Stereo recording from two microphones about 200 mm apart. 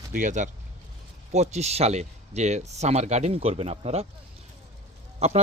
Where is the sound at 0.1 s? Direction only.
40° right (ahead or behind).